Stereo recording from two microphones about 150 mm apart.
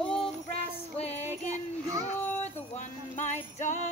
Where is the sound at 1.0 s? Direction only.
45° left (ahead or behind).